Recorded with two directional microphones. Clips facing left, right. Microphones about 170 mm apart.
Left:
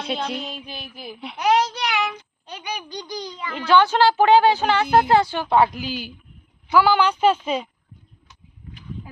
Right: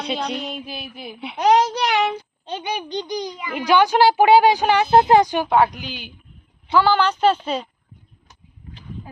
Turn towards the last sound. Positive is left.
turn(degrees=10)  # may be behind; listen again after turning